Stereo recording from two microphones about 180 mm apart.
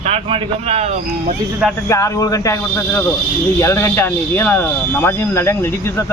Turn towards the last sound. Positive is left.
turn(degrees=15)  # may be behind; listen again after turning